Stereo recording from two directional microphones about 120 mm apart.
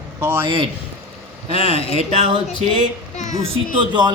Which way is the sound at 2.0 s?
60° right (ahead or behind).